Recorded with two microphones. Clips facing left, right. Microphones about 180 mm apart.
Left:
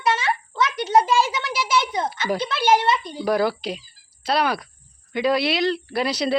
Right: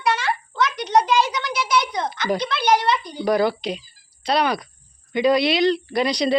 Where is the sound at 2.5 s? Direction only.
25° left (ahead or behind).